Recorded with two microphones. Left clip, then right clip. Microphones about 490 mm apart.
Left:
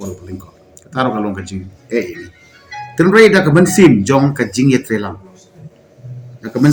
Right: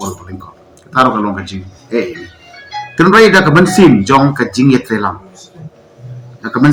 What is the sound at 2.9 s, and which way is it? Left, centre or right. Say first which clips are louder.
Speech: right 2 dB; left.